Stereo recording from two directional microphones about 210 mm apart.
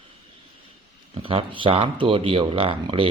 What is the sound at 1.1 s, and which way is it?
Speech, 25° right (ahead or behind).